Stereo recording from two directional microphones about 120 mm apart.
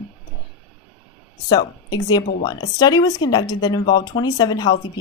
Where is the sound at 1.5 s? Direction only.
35° left (ahead or behind).